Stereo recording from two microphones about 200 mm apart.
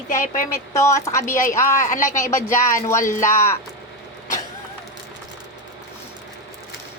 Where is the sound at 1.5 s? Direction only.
15° left (ahead or behind).